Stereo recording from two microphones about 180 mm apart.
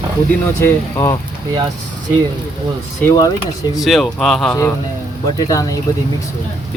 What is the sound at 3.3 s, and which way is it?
Speech, centre (ahead or behind).